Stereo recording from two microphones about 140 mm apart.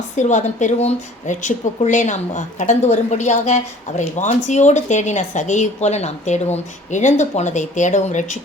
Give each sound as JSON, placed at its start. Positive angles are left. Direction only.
{"t": 0.2, "sound": "speech", "side_deg": 60}